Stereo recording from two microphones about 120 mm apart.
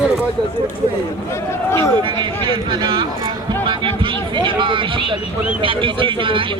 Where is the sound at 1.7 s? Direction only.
25° left (ahead or behind).